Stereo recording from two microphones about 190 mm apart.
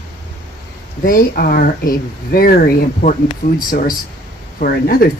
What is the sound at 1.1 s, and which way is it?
Speech, 50° left (ahead or behind).